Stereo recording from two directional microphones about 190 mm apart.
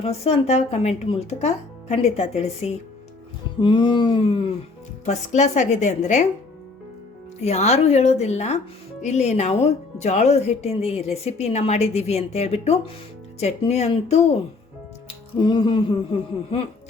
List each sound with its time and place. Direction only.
0.0 s speech: 35° left (ahead or behind)
3.6 s a sound: 25° left (ahead or behind)
5.0 s speech: 40° left (ahead or behind)
7.4 s speech: 35° left (ahead or behind)
15.0 s music: 25° left (ahead or behind)